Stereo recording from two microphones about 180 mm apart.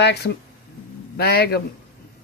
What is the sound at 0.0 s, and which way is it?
Speech, 65° left (ahead or behind).